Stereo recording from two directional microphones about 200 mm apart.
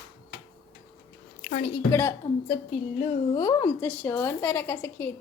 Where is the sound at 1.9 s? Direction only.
15° left (ahead or behind).